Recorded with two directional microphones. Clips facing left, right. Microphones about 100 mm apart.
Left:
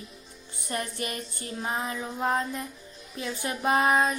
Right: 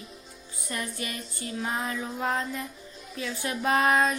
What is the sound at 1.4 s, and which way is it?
Music, 25° left (ahead or behind).